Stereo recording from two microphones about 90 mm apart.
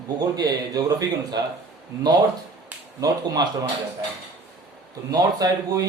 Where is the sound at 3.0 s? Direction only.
45° right (ahead or behind).